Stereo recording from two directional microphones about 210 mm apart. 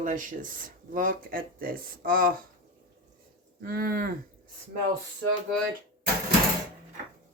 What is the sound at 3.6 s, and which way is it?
Cattle, 45° right (ahead or behind).